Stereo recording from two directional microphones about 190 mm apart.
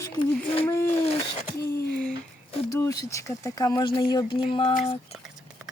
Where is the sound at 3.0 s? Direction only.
15° left (ahead or behind); by 5.0 s 30° left (ahead or behind).